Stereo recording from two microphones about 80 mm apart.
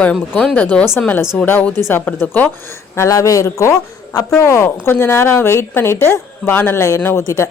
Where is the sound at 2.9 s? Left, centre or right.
Left.